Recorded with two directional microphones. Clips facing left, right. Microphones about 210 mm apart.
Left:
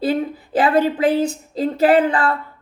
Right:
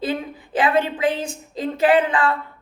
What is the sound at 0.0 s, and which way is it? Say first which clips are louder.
A woman's voice: left 5 dB; 35° left (ahead or behind).